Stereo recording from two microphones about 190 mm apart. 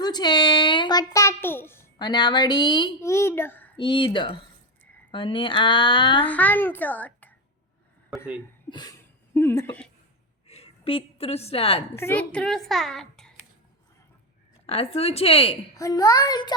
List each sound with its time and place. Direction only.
0.0 s a child's voice: 20° left (ahead or behind)
3.8 s speech: 25° left (ahead or behind)
6.2 s a child's voice: 10° left (ahead or behind)
8.7 s a sound: 20° left (ahead or behind)
10.4 s a sound: 35° left (ahead or behind)
11.9 s a child's voice: 10° left (ahead or behind)
14.7 s a woman's voice: 30° left (ahead or behind)
15.7 s speech: 20° left (ahead or behind)